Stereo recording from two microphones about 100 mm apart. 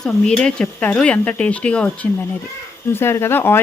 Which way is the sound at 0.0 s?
5° left (ahead or behind).